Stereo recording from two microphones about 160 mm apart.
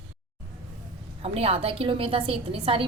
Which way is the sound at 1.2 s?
40° right (ahead or behind).